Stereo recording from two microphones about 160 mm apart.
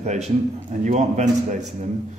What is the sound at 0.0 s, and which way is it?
A man's voice, 45° right (ahead or behind).